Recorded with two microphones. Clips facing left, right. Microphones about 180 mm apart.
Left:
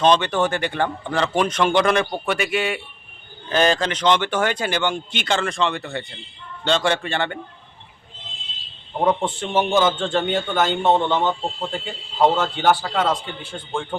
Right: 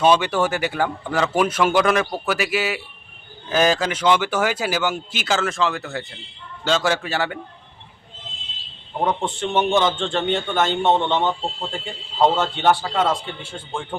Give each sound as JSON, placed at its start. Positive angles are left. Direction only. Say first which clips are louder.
{"t": 0.0, "sound": "a man's voice", "louder": "even", "side_deg": -10}
{"t": 9.0, "sound": "a man's voice", "louder": "left 2 dB", "side_deg": 5}